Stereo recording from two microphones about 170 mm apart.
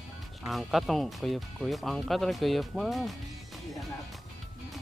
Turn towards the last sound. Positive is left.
turn(degrees=0)  # may be behind; listen again after turning